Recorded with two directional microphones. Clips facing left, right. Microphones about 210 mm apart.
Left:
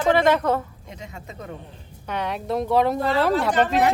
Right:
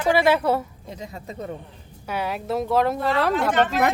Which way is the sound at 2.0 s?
5° right (ahead or behind).